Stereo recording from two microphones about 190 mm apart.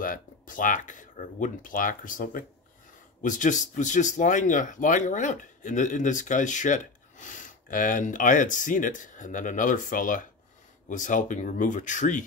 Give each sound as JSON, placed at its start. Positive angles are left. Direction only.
{"t": 0.0, "sound": "speech", "side_deg": 45}